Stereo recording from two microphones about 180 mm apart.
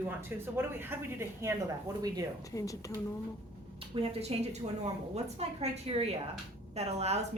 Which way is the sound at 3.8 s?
35° right (ahead or behind).